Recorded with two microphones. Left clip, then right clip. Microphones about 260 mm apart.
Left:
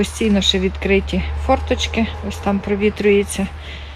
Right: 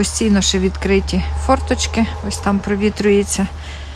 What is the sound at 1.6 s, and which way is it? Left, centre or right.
Speech, right.